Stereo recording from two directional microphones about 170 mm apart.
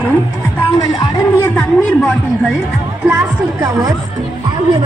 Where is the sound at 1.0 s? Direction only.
15° left (ahead or behind).